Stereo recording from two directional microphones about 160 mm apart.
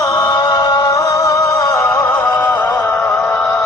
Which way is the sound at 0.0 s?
25° left (ahead or behind).